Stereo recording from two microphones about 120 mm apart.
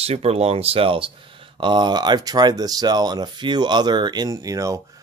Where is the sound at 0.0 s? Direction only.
60° right (ahead or behind).